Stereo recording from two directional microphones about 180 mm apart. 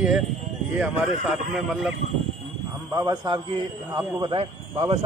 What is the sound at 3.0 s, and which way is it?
A man's voice, 25° right (ahead or behind).